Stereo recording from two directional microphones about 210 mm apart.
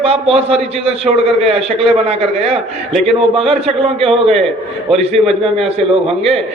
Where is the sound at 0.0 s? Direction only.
25° right (ahead or behind).